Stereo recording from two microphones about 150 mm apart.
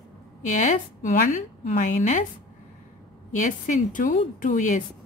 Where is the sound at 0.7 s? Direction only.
60° left (ahead or behind).